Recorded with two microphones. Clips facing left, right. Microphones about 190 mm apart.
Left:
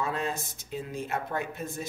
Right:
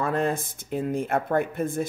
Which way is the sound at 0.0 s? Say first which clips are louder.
Right 6 dB; 55° right (ahead or behind).